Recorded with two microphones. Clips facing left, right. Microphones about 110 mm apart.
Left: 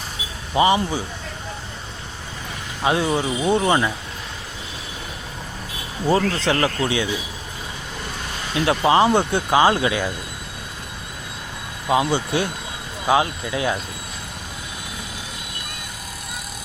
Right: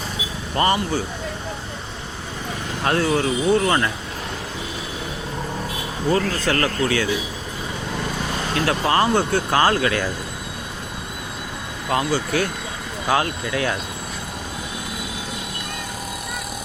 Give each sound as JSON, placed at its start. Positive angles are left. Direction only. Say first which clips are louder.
{"t": 0.5, "sound": "speech", "louder": "left 2 dB", "side_deg": 10}
{"t": 2.8, "sound": "speech", "louder": "even", "side_deg": 15}
{"t": 6.1, "sound": "speech", "louder": "left 2 dB", "side_deg": 25}
{"t": 8.6, "sound": "speech", "louder": "left 4 dB", "side_deg": 20}
{"t": 12.1, "sound": "speech", "louder": "even", "side_deg": 25}